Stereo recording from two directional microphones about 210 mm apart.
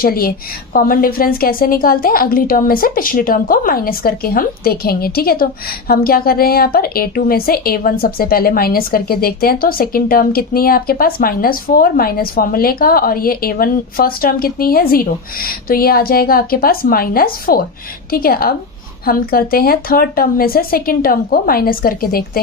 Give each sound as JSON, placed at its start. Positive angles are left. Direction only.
{"t": 0.0, "sound": "a woman's voice", "side_deg": 45}